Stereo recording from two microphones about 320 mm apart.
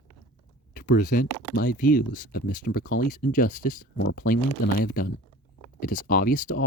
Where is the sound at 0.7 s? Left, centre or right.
Left.